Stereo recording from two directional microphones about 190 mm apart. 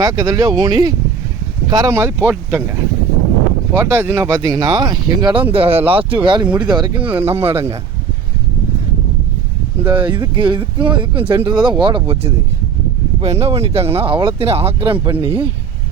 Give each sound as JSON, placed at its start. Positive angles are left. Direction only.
{"t": 0.0, "sound": "speech", "side_deg": -20}
{"t": 7.0, "sound": "speech", "side_deg": -10}
{"t": 7.3, "sound": "speech", "side_deg": -30}
{"t": 9.8, "sound": "speech", "side_deg": -25}